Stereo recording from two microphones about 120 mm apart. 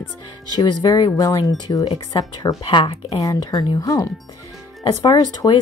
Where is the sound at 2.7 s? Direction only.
50° left (ahead or behind).